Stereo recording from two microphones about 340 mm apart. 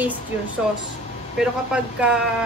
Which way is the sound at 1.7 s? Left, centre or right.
Centre.